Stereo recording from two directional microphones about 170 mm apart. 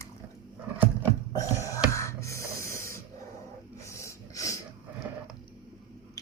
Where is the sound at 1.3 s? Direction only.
20° left (ahead or behind).